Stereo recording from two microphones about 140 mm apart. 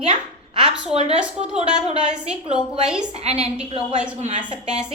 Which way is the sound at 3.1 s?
50° right (ahead or behind).